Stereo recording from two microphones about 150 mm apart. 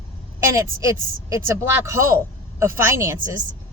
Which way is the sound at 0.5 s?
20° right (ahead or behind).